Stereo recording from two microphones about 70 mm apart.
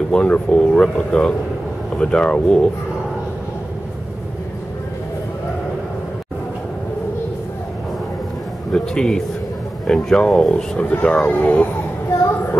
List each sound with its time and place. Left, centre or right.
0.1 s speech: centre
8.7 s speech: centre